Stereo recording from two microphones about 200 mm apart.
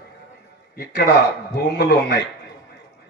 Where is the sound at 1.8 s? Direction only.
55° left (ahead or behind).